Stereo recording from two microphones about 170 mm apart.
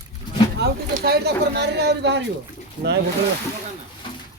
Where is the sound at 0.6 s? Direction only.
70° right (ahead or behind).